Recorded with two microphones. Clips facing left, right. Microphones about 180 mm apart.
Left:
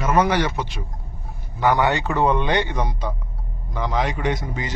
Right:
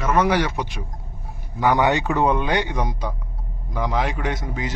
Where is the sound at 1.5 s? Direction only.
15° right (ahead or behind); by 4.7 s centre (ahead or behind).